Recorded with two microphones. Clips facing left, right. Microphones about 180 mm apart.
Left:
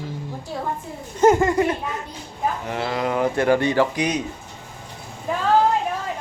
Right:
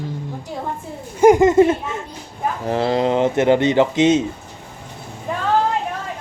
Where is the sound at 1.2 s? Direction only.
15° right (ahead or behind).